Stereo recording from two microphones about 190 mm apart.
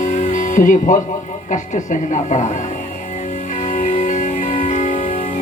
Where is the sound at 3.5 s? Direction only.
40° left (ahead or behind).